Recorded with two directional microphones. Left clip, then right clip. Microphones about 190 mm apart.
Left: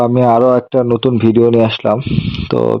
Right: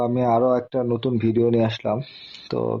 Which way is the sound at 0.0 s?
35° left (ahead or behind).